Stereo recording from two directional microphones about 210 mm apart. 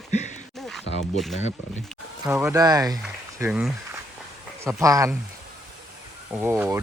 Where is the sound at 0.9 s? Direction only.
55° left (ahead or behind).